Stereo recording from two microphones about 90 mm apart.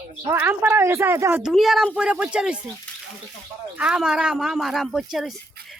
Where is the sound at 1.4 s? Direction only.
Centre (ahead or behind).